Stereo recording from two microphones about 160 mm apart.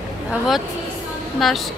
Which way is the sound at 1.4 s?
Centre (ahead or behind).